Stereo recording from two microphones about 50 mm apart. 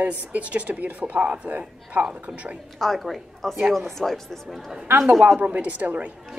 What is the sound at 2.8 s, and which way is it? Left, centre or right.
Speech, centre.